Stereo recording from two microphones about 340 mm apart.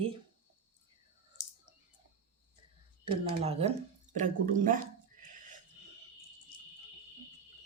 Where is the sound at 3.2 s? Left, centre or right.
Centre.